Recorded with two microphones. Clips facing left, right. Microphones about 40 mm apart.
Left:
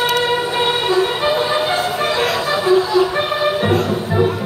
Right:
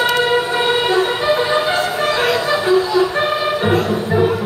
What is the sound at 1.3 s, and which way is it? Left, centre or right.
Music, centre.